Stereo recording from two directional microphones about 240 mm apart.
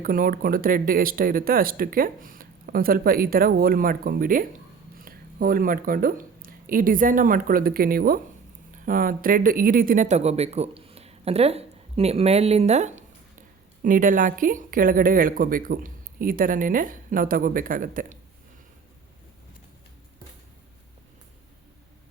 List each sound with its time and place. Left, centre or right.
0.0 s speech: right